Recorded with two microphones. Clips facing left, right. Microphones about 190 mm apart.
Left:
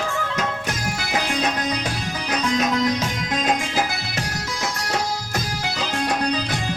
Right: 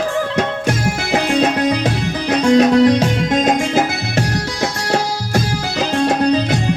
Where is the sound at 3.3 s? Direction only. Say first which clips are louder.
Right 7 dB; 45° right (ahead or behind).